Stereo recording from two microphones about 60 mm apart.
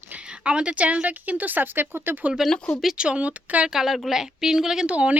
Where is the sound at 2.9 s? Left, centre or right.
Centre.